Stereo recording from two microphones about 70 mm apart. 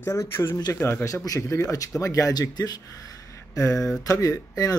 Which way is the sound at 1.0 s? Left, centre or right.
Left.